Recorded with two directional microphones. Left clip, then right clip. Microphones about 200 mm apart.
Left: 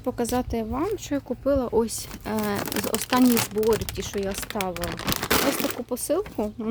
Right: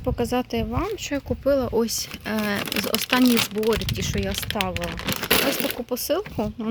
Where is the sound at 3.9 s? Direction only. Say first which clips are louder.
Right 2 dB; centre (ahead or behind).